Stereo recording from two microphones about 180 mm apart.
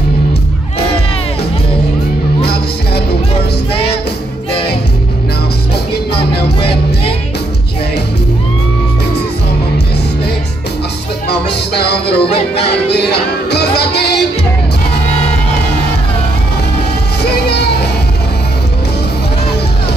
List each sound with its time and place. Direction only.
11.2 s music: 65° left (ahead or behind)
17.2 s music: 65° left (ahead or behind)